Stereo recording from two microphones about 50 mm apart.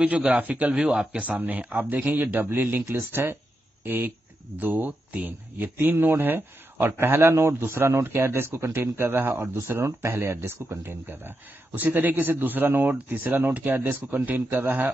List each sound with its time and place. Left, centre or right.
0.4 s speech: right
0.7 s speech: centre
1.2 s a man's voice: right